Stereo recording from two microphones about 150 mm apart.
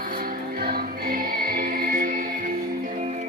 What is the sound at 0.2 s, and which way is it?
Music, 80° right.